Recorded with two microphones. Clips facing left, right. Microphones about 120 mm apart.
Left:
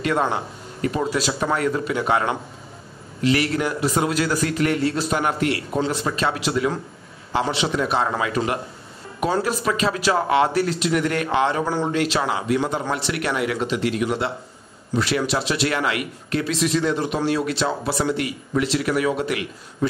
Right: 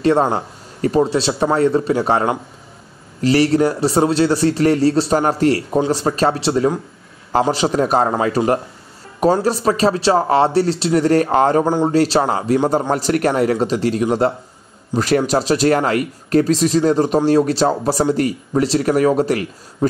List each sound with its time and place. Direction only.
0.0 s a man's voice: 35° right (ahead or behind)